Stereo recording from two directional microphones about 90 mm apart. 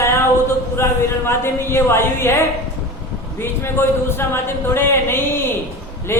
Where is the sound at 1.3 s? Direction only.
30° left (ahead or behind).